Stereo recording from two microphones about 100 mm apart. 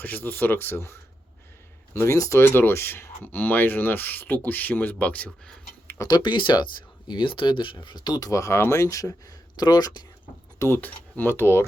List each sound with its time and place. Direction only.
0.0 s speech: 20° left (ahead or behind)
2.4 s speech: 20° left (ahead or behind)
6.0 s speech: 45° left (ahead or behind)
10.6 s speech: 20° left (ahead or behind)